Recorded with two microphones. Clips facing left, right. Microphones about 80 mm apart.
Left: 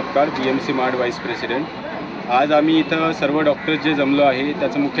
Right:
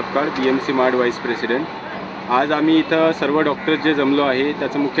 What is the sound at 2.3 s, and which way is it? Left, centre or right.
Speech, right.